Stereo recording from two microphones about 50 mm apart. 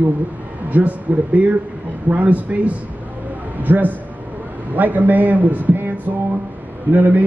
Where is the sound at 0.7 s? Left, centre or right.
Right.